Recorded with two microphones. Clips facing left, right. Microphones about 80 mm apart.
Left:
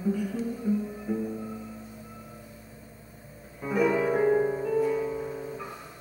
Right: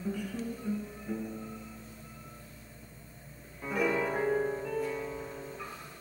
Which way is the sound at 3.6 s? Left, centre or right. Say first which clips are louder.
Left 6 dB; centre.